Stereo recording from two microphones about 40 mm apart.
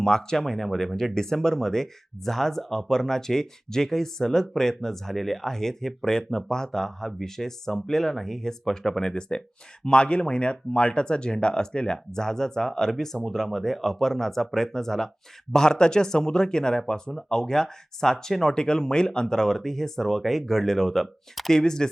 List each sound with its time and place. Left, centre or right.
0.0 s speech: centre